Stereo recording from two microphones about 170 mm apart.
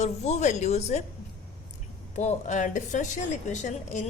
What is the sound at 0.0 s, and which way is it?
A woman's voice, 40° left (ahead or behind).